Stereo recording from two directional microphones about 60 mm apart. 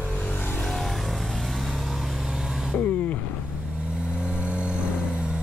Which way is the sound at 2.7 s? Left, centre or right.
Left.